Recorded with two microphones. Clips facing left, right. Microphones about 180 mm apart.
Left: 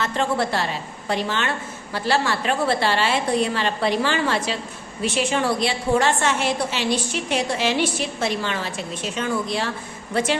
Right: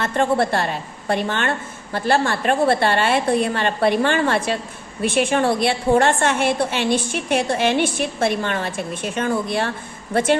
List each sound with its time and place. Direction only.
0.0 s a woman's voice: 55° right (ahead or behind)